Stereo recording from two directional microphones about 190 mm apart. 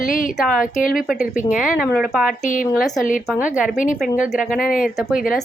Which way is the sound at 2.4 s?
45° left (ahead or behind).